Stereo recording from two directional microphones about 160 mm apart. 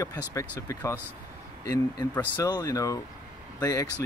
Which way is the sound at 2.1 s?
15° left (ahead or behind).